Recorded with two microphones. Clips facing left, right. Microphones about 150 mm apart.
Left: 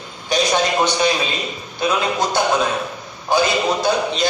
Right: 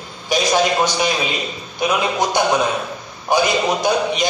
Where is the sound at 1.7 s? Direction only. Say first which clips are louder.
Right 1 dB; 15° right (ahead or behind).